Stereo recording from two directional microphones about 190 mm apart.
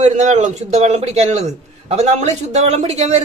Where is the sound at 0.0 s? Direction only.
40° right (ahead or behind).